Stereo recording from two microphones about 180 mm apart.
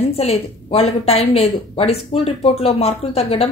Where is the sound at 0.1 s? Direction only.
35° left (ahead or behind).